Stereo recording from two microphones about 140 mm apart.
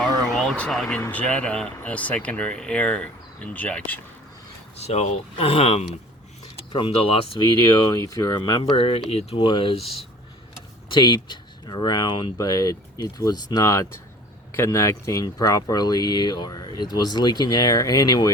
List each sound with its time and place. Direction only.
0.3 s speech: 5° left (ahead or behind)
4.8 s speech: 50° left (ahead or behind)
7.9 s speech: 25° left (ahead or behind); by 10.1 s 45° left (ahead or behind)
10.9 s speech: 35° left (ahead or behind)